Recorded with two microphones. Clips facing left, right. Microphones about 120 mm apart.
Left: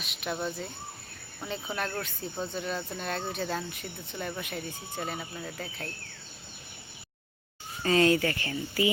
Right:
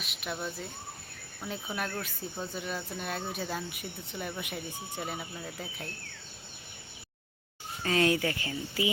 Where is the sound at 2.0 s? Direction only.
5° right (ahead or behind).